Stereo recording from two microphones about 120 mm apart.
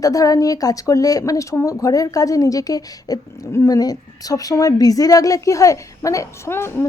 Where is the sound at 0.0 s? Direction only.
30° left (ahead or behind).